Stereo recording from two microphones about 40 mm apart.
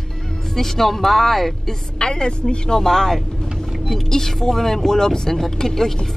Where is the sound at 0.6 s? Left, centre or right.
Centre.